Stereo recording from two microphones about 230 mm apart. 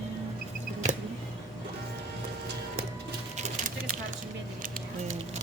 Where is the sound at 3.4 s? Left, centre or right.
Right.